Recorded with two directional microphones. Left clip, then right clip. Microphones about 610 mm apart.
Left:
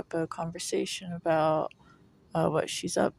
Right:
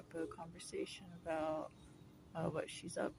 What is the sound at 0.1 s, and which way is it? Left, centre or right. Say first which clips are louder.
Speech: left 13 dB; right.